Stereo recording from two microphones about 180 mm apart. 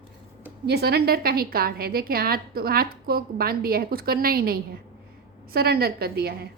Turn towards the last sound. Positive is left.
turn(degrees=-60)  # may be behind; listen again after turning